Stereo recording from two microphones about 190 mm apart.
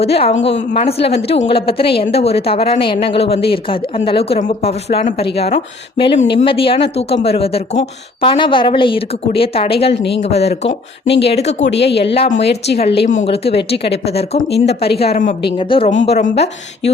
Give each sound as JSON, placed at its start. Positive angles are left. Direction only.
{"t": 0.0, "sound": "speech", "side_deg": 30}
{"t": 11.7, "sound": "speech", "side_deg": 60}
{"t": 12.8, "sound": "speech", "side_deg": 30}
{"t": 14.5, "sound": "speech", "side_deg": 60}
{"t": 14.9, "sound": "speech", "side_deg": 30}